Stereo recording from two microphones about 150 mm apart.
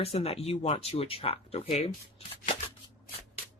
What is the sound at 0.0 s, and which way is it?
Speech, 40° left (ahead or behind).